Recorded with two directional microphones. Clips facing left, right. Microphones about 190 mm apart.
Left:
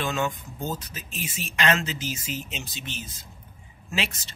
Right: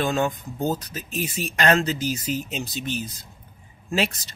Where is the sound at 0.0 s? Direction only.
35° right (ahead or behind).